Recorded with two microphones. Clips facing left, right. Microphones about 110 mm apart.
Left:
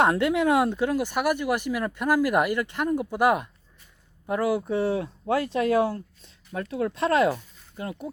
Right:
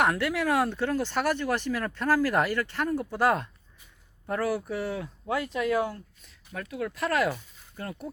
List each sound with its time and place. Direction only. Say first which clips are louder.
0.0 s speech: left 4 dB; 25° left (ahead or behind)